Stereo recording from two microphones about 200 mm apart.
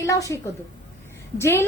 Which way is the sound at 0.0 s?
15° left (ahead or behind).